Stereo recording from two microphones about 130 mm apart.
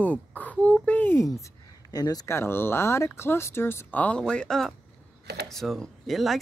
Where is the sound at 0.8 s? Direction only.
15° left (ahead or behind).